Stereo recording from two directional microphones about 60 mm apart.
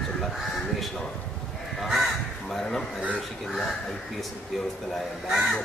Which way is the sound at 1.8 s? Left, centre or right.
Centre.